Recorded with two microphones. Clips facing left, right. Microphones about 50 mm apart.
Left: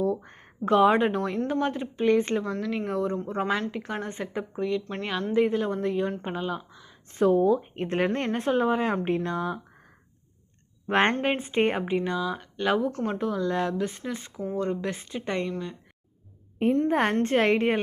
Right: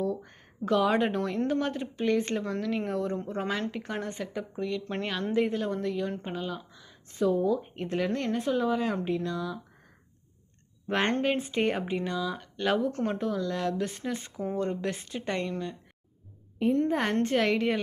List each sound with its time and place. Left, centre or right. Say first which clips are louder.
0.0 s a sound: left 4 dB; left
0.9 s speech: left 2 dB; centre
2.4 s speech: left 1 dB; centre
4.1 s speech: left 3 dB; left
7.1 s speech: left 5 dB; left
11.2 s speech: left 3 dB; left; by 13.4 s centre
13.4 s speech: left 4 dB; left
13.7 s speech: left 2 dB; centre
14.8 s speech: left 1 dB; centre
16.9 s speech: left 3 dB; left